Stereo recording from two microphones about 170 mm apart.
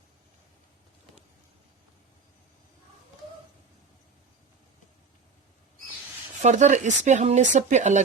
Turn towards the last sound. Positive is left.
turn(degrees=-45)  # may be behind; listen again after turning